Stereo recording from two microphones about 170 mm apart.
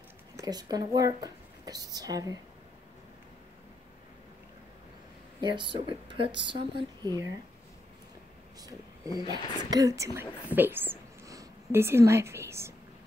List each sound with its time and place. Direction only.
0.4 s speech: 20° right (ahead or behind)
5.4 s speech: 30° right (ahead or behind)
8.6 s speech: 20° right (ahead or behind)